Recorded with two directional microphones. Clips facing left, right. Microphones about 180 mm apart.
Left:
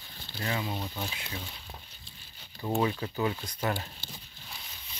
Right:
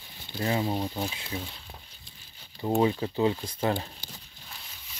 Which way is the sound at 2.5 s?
20° right (ahead or behind).